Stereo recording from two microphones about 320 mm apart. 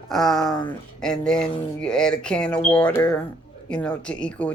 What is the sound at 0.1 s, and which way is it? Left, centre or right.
Speech, centre.